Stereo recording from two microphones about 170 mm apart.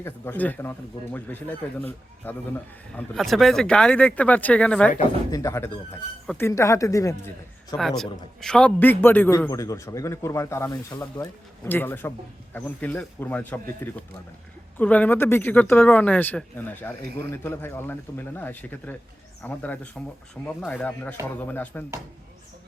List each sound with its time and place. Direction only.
0.0 s a man's voice: 10° left (ahead or behind)
2.9 s a man's voice: centre (ahead or behind)
5.3 s a man's voice: 15° left (ahead or behind)
7.8 s a man's voice: centre (ahead or behind)